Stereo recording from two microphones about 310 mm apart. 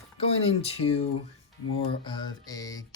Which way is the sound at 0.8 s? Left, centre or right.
Centre.